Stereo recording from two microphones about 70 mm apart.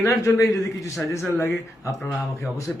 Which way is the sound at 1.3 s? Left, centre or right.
Left.